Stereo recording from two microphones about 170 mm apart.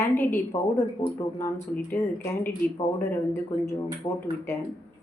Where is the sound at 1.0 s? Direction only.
25° left (ahead or behind).